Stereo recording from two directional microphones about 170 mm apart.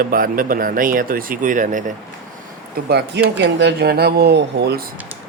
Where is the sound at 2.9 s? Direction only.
80° right.